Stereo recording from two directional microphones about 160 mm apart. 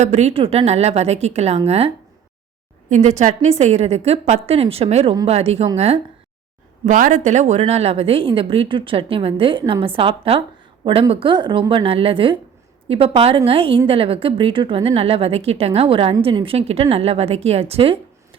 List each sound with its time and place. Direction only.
0.0 s a woman's voice: 45° right (ahead or behind)
2.9 s a woman's voice: 50° right (ahead or behind)
6.8 s a woman's voice: 55° right (ahead or behind); by 18.0 s 35° right (ahead or behind)